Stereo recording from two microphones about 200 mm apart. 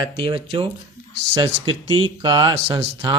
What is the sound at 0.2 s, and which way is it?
Speech, 25° right (ahead or behind).